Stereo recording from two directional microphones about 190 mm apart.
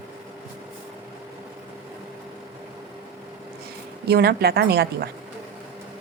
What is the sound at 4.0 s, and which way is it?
A woman's voice, 55° right (ahead or behind).